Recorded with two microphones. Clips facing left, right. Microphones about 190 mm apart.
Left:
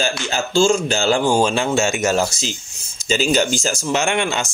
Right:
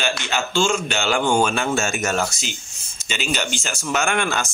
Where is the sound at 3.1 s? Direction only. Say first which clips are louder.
Left 8 dB; 40° left (ahead or behind); by 4.4 s 20° left (ahead or behind).